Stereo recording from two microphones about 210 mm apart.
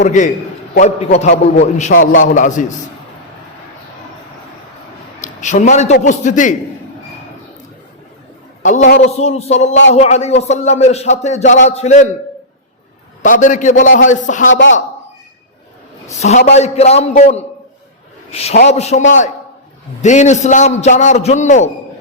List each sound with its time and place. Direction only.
0.0 s speech: 35° left (ahead or behind)
2.0 s a man's voice: 70° left (ahead or behind)
2.3 s speech: 35° left (ahead or behind)
5.2 s speech: 35° left (ahead or behind)
8.6 s speech: 35° left (ahead or behind)
13.2 s speech: 35° left (ahead or behind)
14.5 s a man's voice: 65° left (ahead or behind)
16.0 s speech: 30° left (ahead or behind)